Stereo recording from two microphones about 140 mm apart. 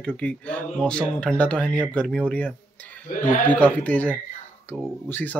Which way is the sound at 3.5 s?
10° left (ahead or behind).